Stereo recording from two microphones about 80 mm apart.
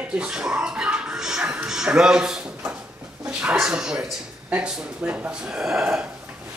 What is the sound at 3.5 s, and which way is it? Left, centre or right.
A man's voice, centre.